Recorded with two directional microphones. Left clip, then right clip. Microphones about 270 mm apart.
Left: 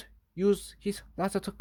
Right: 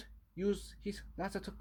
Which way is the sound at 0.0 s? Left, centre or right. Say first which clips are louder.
Left 9 dB; left.